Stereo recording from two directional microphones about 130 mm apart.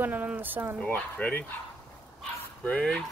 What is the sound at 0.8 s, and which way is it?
Speech, 15° left (ahead or behind).